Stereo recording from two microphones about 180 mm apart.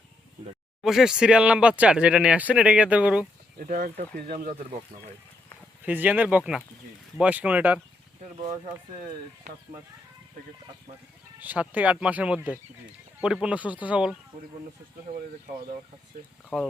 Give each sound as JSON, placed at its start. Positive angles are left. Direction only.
{"t": 0.8, "sound": "speech", "side_deg": 0}
{"t": 3.6, "sound": "speech", "side_deg": -50}
{"t": 5.8, "sound": "speech", "side_deg": -10}
{"t": 8.4, "sound": "speech", "side_deg": -35}
{"t": 11.3, "sound": "speech", "side_deg": -10}
{"t": 15.1, "sound": "speech", "side_deg": -50}
{"t": 16.5, "sound": "speech", "side_deg": -5}